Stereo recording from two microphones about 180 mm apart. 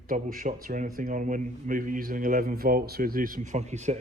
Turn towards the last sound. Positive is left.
turn(degrees=-40)  # may be behind; listen again after turning